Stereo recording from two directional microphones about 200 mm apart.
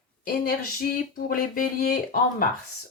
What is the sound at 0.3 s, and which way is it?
Speech, 45° left (ahead or behind).